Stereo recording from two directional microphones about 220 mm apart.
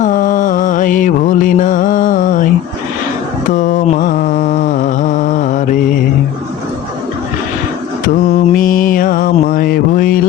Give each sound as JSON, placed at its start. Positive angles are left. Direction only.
{"t": 0.0, "sound": "music", "side_deg": 35}
{"t": 3.5, "sound": "mantra", "side_deg": 35}
{"t": 8.4, "sound": "mantra", "side_deg": 40}